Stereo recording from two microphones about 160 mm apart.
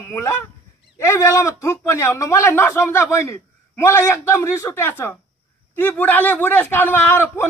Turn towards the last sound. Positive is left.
turn(degrees=15)  # may be behind; listen again after turning